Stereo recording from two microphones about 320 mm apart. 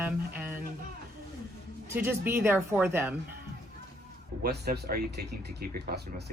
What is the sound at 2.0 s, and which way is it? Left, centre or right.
Speech, centre.